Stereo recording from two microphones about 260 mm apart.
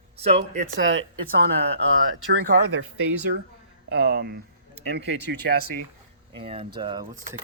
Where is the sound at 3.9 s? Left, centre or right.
Right.